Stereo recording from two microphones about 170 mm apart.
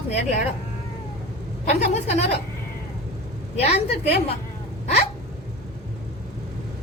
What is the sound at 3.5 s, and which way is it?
Speech, 40° left (ahead or behind).